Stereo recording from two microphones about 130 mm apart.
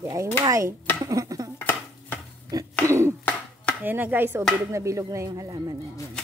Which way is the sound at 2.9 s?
25° right (ahead or behind).